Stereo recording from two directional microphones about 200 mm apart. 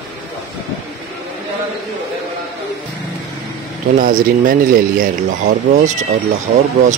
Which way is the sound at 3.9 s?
45° right (ahead or behind).